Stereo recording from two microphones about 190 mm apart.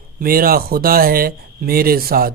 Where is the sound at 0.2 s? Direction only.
50° right (ahead or behind).